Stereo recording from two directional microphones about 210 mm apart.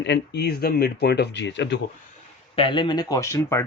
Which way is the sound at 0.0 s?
55° left (ahead or behind).